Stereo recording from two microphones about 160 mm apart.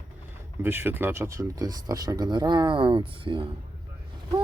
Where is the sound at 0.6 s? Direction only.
15° right (ahead or behind).